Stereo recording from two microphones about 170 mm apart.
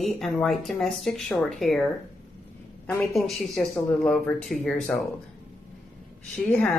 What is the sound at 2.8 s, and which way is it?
A woman's voice, 5° left (ahead or behind).